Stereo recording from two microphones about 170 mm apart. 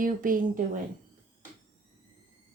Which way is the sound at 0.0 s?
55° right (ahead or behind).